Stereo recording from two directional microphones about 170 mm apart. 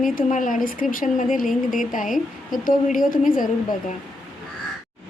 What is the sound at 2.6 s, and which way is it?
Speech, 55° left (ahead or behind).